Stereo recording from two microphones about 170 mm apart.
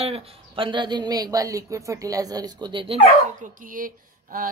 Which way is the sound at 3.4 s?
55° right (ahead or behind).